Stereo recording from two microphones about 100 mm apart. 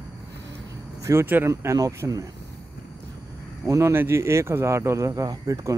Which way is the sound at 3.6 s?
30° right (ahead or behind).